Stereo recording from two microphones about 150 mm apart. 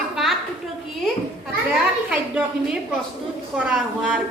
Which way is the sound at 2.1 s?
10° right (ahead or behind).